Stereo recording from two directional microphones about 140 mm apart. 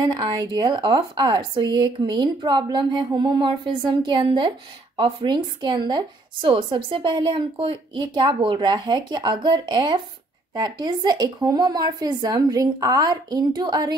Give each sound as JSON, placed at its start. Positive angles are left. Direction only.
{"t": 0.0, "sound": "a woman's voice", "side_deg": -30}